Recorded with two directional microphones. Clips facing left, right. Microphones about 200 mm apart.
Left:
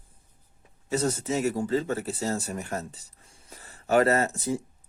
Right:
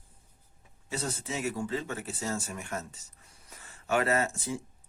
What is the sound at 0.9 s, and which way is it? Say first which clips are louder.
Speech: left 9 dB; 40° left (ahead or behind).